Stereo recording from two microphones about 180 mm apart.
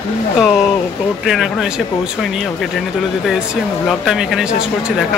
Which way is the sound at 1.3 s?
5° right (ahead or behind).